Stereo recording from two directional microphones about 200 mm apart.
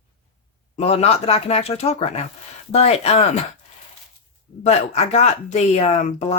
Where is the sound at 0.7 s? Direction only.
30° left (ahead or behind).